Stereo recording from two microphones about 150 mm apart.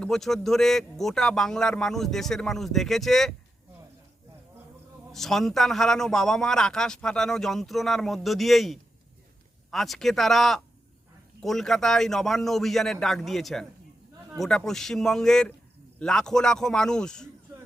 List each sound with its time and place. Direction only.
0.0 s a man's voice: centre (ahead or behind)
5.1 s a man's voice: centre (ahead or behind)